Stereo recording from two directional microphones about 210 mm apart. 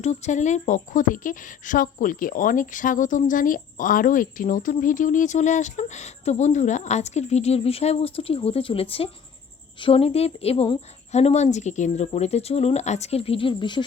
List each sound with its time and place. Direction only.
0.0 s a woman's voice: 35° left (ahead or behind)